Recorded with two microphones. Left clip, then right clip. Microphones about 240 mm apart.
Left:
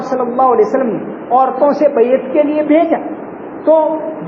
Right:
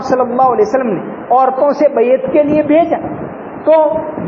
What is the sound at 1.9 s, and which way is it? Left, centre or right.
A woman's voice, right.